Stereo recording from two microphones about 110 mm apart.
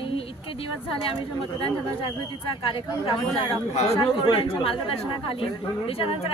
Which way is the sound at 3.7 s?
70° left (ahead or behind).